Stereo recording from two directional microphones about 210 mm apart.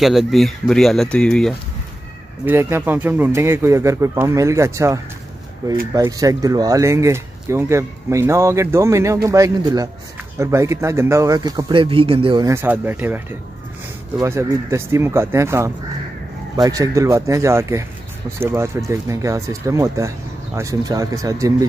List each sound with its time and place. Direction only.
0.0 s speech: centre (ahead or behind)
2.4 s speech: 10° right (ahead or behind)